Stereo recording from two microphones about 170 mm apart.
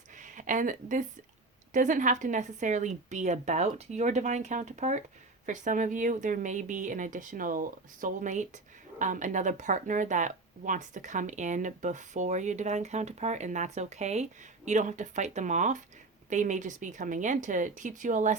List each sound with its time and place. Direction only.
0.2 s a woman's voice: 50° right (ahead or behind)